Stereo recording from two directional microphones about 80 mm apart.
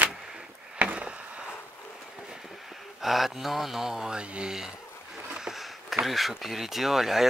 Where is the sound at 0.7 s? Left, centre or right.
Centre.